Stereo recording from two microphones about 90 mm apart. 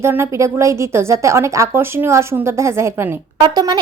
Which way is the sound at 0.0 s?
30° right (ahead or behind).